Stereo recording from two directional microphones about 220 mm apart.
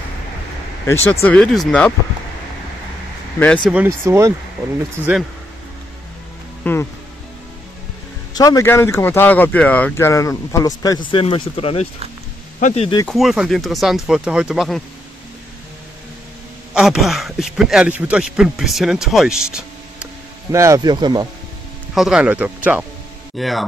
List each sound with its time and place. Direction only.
0.8 s a man's voice: 10° left (ahead or behind)
3.7 s speech: 10° right (ahead or behind)
6.6 s speech: 10° left (ahead or behind)
8.4 s speech: 15° left (ahead or behind)
13.0 s a man's voice: centre (ahead or behind)
16.7 s a man's voice: centre (ahead or behind)
20.5 s speech: 15° right (ahead or behind)
21.9 s a man's voice: 5° right (ahead or behind)